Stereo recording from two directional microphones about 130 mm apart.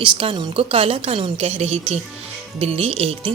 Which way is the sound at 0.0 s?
40° right (ahead or behind).